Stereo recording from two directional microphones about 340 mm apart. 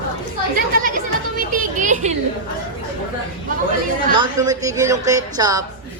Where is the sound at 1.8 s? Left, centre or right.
Right.